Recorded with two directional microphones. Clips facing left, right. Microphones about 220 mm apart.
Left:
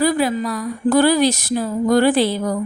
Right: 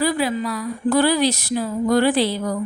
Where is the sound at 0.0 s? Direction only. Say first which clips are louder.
Left 3 dB; 45° left (ahead or behind).